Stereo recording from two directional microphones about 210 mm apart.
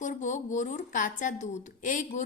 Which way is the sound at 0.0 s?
35° left (ahead or behind).